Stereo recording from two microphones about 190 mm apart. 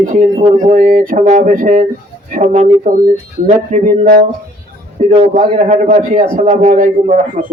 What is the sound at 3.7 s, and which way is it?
Speech, 50° right (ahead or behind).